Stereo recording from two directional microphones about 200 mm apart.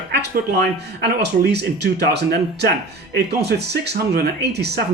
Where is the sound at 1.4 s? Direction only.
55° right (ahead or behind).